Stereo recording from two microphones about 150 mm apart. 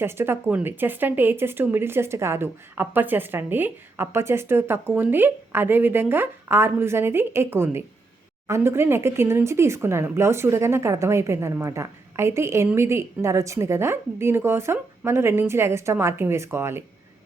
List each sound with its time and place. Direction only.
0.0 s speech: 15° right (ahead or behind)